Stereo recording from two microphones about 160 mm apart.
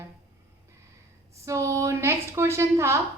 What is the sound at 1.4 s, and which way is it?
A woman's voice, 20° right (ahead or behind).